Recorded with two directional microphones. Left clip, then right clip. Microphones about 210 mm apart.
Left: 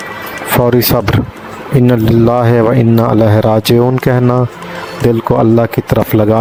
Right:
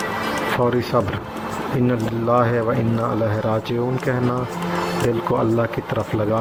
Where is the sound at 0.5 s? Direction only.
50° left (ahead or behind).